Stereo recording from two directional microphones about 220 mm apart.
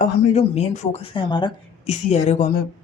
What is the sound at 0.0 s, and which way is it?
A woman's voice, 30° left (ahead or behind).